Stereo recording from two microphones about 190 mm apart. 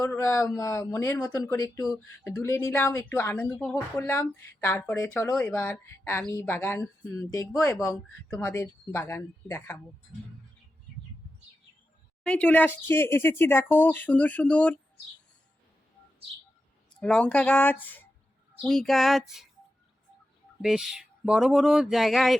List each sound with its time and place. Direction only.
0.0 s speech: 15° left (ahead or behind)
12.2 s speech: 5° left (ahead or behind)
17.0 s speech: 5° left (ahead or behind)
20.6 s speech: 5° right (ahead or behind)